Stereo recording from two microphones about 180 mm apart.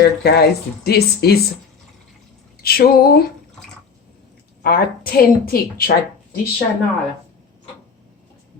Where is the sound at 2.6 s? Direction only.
55° left (ahead or behind).